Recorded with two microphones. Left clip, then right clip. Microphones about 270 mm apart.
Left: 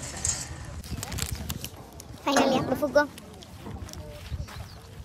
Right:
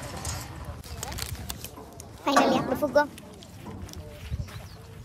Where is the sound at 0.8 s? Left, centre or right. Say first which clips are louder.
Left 1 dB; centre.